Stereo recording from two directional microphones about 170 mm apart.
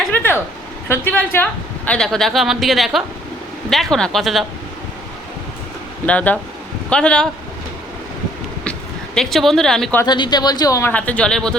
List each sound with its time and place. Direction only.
0.1 s a sound: 10° left (ahead or behind)
0.9 s speech: 10° left (ahead or behind)
6.1 s speech: 10° left (ahead or behind)
9.1 s speech: centre (ahead or behind)
10.0 s speech: 25° left (ahead or behind)
10.9 s speech: 10° left (ahead or behind)